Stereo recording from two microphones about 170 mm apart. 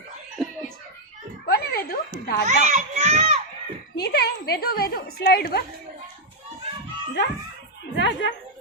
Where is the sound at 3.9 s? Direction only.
75° left (ahead or behind).